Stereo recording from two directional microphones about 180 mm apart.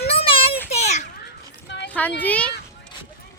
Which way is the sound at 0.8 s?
40° left (ahead or behind).